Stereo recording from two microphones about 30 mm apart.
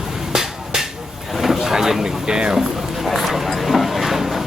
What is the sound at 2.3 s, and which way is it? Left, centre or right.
Music, right.